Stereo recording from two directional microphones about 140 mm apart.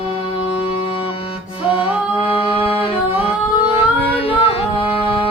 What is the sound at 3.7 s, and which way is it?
Music, 45° left (ahead or behind).